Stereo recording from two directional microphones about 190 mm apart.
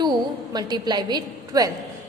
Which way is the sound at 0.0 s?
20° right (ahead or behind).